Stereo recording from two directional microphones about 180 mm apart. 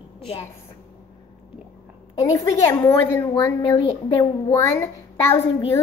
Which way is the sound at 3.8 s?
30° left (ahead or behind).